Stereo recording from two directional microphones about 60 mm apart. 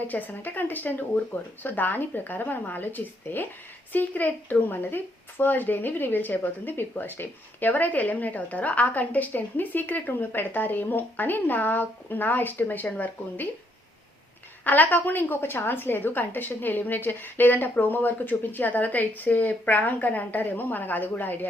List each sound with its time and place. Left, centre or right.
0.0 s speech: left
14.6 s speech: left